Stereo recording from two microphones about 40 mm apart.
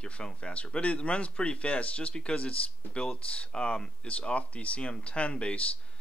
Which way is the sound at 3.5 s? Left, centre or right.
Left.